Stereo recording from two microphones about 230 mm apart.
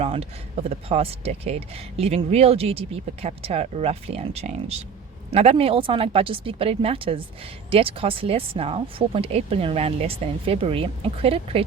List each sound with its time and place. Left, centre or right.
0.0 s speech: right